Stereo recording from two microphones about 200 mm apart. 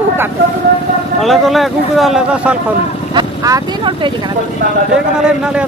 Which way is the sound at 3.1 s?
20° right (ahead or behind).